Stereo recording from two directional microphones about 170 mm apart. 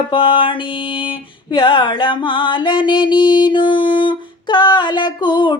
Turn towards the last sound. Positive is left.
turn(degrees=30)  # may be behind; listen again after turning